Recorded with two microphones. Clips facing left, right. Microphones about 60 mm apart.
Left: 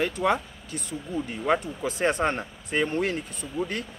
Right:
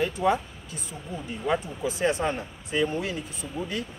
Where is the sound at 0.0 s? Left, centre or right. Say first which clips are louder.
Even; left.